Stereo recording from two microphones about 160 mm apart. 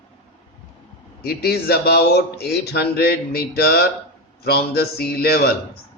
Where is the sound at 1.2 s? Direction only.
80° left.